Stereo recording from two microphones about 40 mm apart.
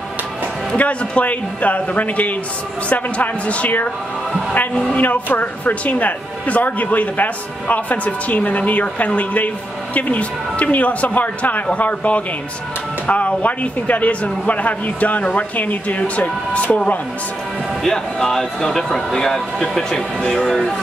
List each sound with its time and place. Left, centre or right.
0.7 s speech: left
4.9 s speech: left
17.8 s speech: centre